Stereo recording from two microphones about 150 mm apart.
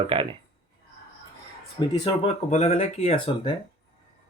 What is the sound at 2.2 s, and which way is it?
Speech, 45° left (ahead or behind).